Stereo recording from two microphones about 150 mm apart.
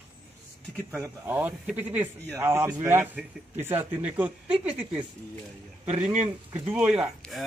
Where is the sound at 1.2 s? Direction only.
15° right (ahead or behind).